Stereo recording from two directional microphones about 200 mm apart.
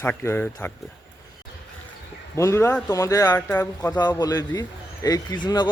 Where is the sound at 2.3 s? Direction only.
15° left (ahead or behind).